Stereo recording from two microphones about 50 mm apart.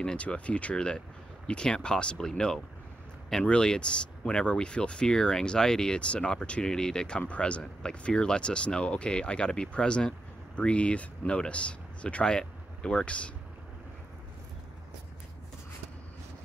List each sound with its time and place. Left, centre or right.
0.0 s speech: centre